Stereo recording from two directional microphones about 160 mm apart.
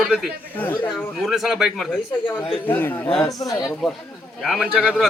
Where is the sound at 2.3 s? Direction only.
35° left (ahead or behind).